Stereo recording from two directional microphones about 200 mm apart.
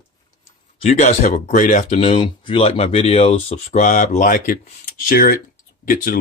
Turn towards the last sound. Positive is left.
turn(degrees=45)  # may be behind; listen again after turning